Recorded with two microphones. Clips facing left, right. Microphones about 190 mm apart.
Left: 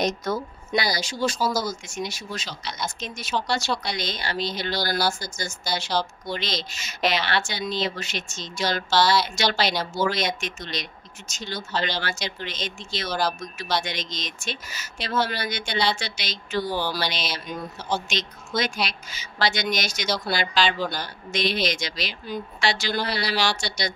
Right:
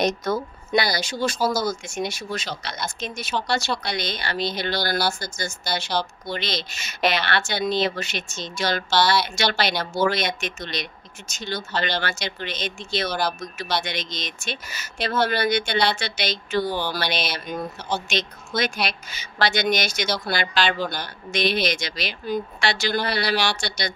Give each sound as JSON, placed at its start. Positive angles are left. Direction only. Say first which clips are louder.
{"t": 0.0, "sound": "speech", "louder": "right 2 dB", "side_deg": -60}
{"t": 18.6, "sound": "speech", "louder": "right 2 dB", "side_deg": -60}